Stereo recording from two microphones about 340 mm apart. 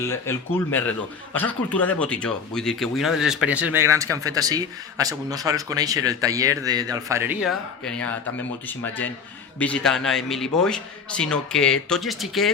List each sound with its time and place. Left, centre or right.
0.0 s speech: centre